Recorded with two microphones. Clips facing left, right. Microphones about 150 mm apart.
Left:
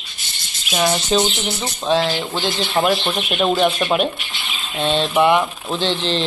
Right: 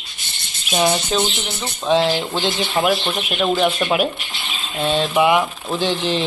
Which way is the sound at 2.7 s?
5° right (ahead or behind).